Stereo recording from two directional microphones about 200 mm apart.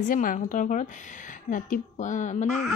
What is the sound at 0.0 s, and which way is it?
A woman's voice, 40° left (ahead or behind).